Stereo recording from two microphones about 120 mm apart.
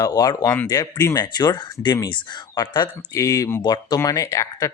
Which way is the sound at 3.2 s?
25° left (ahead or behind).